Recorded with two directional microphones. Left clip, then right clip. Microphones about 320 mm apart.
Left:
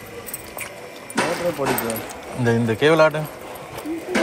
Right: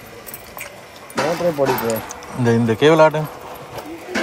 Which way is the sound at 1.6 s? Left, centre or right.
Right.